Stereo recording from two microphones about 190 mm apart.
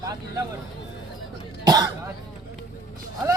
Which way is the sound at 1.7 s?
20° right (ahead or behind).